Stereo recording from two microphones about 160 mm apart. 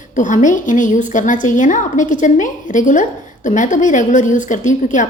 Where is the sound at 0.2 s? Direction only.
50° left (ahead or behind).